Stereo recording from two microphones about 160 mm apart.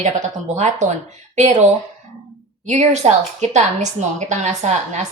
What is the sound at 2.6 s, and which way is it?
A woman's voice, 45° right (ahead or behind).